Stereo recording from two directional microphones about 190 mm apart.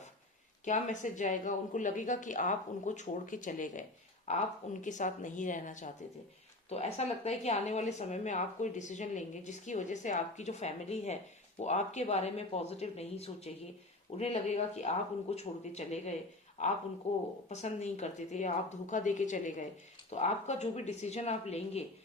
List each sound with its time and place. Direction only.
0.6 s a woman's voice: 40° left (ahead or behind)
17.5 s a woman's voice: 35° left (ahead or behind)